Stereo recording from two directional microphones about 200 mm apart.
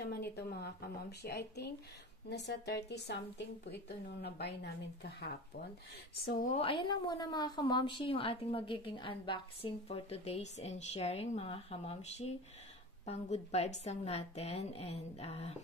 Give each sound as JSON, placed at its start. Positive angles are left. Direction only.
{"t": 0.0, "sound": "a woman's voice", "side_deg": 50}
{"t": 6.5, "sound": "a woman's voice", "side_deg": 25}